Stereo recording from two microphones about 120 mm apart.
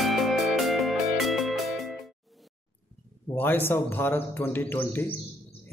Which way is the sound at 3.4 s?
15° left (ahead or behind).